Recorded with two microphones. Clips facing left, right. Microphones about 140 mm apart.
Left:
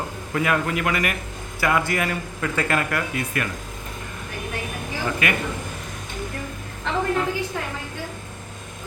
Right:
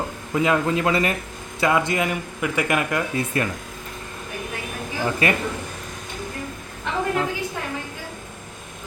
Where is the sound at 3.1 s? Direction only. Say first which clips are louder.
Right 3 dB; 30° right (ahead or behind).